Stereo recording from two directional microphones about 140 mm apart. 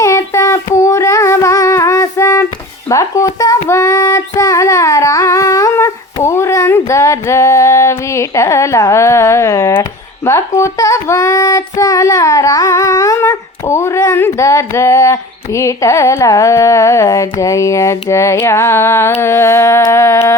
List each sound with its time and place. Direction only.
0.0 s child singing: 20° left (ahead or behind)
6.2 s female singing: 20° left (ahead or behind)
10.2 s child singing: 20° left (ahead or behind)
19.2 s a sound: 20° left (ahead or behind)